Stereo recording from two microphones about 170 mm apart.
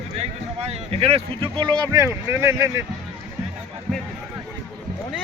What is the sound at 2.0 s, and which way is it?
Speech, 15° right (ahead or behind).